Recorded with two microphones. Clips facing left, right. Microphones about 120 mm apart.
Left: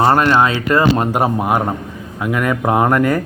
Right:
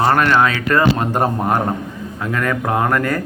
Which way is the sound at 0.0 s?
25° left (ahead or behind).